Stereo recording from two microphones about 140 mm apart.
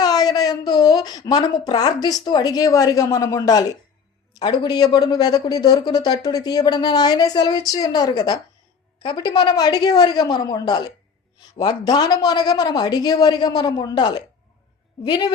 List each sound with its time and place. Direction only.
0.0 s a man's voice: 30° left (ahead or behind)